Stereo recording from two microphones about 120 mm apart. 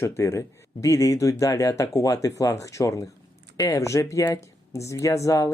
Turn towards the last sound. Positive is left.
turn(degrees=25)  # may be behind; listen again after turning